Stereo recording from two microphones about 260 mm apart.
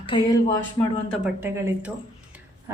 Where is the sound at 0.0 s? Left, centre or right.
Centre.